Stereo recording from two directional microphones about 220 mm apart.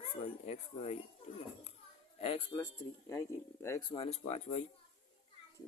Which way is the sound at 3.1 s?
10° left (ahead or behind).